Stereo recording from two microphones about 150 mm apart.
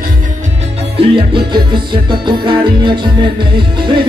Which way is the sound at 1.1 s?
35° right (ahead or behind).